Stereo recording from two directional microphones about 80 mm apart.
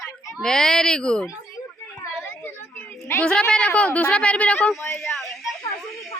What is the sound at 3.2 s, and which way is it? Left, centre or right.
Speech, centre.